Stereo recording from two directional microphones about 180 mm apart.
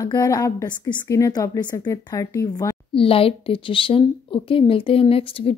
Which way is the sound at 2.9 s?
30° left (ahead or behind).